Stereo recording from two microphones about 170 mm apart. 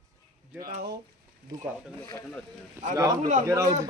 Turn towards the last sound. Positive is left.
turn(degrees=-20)  # may be behind; listen again after turning